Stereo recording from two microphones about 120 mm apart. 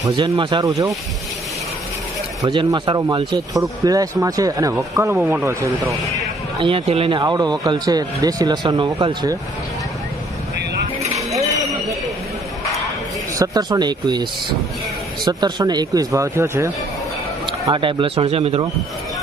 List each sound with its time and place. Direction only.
0.1 s speech: 40° right (ahead or behind)
0.7 s speech: 30° right (ahead or behind)
2.4 s speech: 40° right (ahead or behind)
5.1 s speech: 15° right (ahead or behind)
6.6 s speech: 50° right (ahead or behind); by 9.4 s 30° right (ahead or behind)
11.1 s a sound: 25° right (ahead or behind)
13.4 s speech: 35° right (ahead or behind)
15.2 s speech: 35° right (ahead or behind)
17.5 s speech: 45° right (ahead or behind)